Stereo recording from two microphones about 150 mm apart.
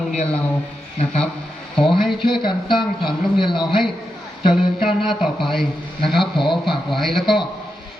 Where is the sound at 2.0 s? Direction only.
Centre (ahead or behind).